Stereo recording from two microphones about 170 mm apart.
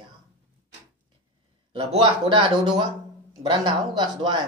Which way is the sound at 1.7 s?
30° right (ahead or behind).